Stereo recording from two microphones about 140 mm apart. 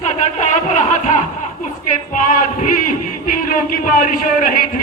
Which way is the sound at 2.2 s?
75° left (ahead or behind).